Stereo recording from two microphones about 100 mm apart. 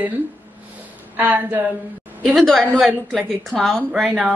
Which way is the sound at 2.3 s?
5° left (ahead or behind).